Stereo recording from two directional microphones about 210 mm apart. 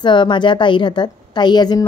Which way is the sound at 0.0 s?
20° left (ahead or behind).